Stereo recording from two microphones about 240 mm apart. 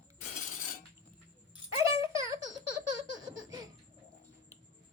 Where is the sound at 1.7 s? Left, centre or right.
Centre.